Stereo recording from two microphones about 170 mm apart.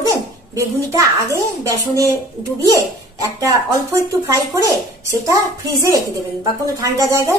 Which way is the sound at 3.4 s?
20° right (ahead or behind).